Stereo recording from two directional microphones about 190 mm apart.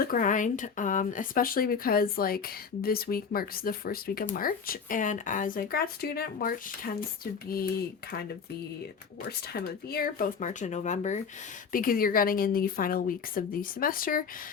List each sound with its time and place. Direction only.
0.1 s speech: 45° left (ahead or behind)
9.5 s speech: 55° left (ahead or behind)